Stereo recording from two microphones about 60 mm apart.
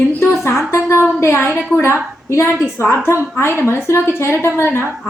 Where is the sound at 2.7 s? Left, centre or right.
Left.